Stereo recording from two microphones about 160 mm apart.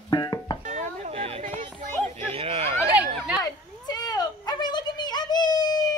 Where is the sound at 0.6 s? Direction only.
45° right (ahead or behind).